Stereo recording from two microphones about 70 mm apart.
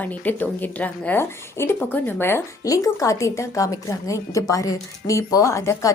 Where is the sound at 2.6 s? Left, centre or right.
Left.